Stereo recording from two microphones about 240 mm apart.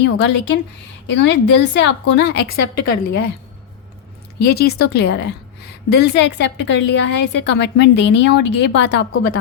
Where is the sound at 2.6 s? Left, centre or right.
Left.